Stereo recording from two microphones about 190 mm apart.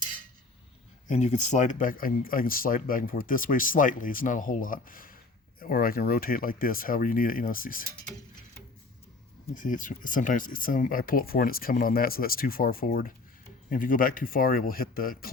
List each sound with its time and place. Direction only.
1.0 s speech: 40° left (ahead or behind)
9.6 s speech: 45° left (ahead or behind)